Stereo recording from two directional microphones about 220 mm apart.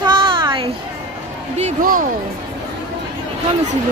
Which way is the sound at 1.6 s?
35° right (ahead or behind).